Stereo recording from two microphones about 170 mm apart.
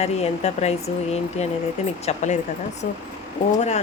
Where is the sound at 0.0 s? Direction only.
40° left (ahead or behind).